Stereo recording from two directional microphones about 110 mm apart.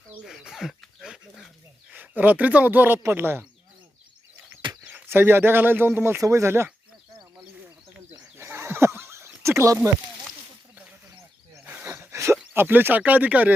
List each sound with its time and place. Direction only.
0.1 s bird: 5° right (ahead or behind)
1.9 s speech: 15° right (ahead or behind)
4.8 s a sound: 10° right (ahead or behind)
5.0 s speech: 20° right (ahead or behind)
8.1 s neigh: 25° right (ahead or behind)
11.6 s a sound: 15° right (ahead or behind)
12.5 s speech: 20° right (ahead or behind)